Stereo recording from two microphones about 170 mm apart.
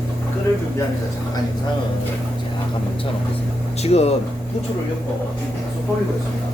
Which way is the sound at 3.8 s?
40° left (ahead or behind).